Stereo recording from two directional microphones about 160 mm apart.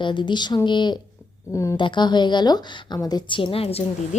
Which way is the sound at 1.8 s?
30° left (ahead or behind).